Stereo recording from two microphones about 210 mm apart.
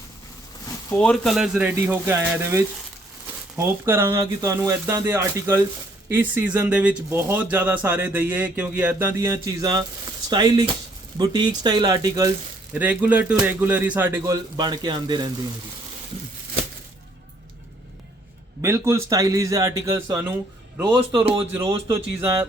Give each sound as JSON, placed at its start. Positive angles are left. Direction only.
{"t": 0.9, "sound": "speech", "side_deg": 5}
{"t": 14.5, "sound": "speech", "side_deg": -20}
{"t": 18.6, "sound": "speech", "side_deg": -10}